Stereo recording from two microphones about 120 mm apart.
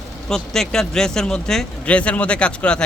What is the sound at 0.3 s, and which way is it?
Speech, 5° left (ahead or behind).